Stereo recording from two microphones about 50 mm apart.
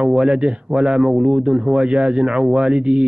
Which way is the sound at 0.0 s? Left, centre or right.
Centre.